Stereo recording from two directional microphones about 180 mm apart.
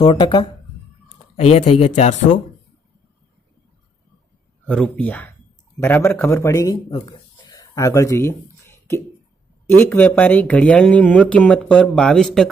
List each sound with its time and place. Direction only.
0.0 s speech: 25° left (ahead or behind)
1.0 s speech: 40° left (ahead or behind)
4.6 s speech: 5° left (ahead or behind)
6.9 s a sound: 25° left (ahead or behind)
9.7 s speech: 10° left (ahead or behind)